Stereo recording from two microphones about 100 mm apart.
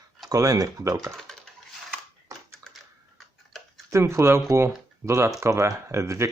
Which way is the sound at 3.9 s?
30° right (ahead or behind).